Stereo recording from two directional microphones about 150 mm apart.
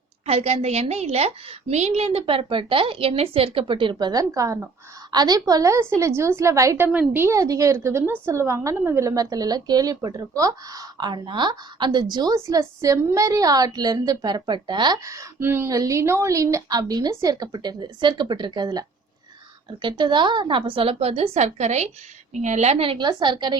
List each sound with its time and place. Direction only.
0.3 s a woman's voice: 45° right (ahead or behind)